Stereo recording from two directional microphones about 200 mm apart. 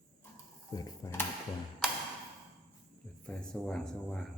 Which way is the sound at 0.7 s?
15° left (ahead or behind).